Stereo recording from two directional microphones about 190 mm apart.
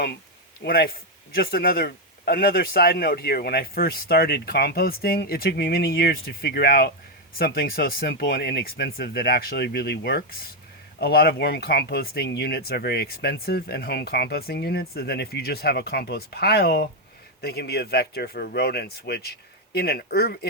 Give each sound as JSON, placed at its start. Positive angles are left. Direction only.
{"t": 0.6, "sound": "a man's voice", "side_deg": 55}